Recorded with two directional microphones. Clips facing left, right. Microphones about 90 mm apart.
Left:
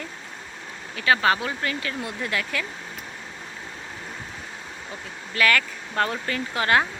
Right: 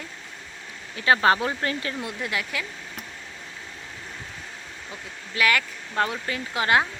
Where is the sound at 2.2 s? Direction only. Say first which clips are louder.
Left 2 dB; 15° right (ahead or behind).